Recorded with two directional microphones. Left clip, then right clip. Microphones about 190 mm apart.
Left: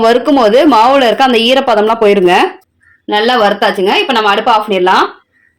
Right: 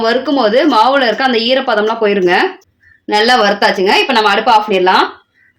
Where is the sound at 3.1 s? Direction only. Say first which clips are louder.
Left 1 dB; 15° left (ahead or behind).